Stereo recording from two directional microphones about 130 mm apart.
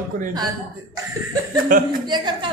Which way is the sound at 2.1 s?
35° right (ahead or behind).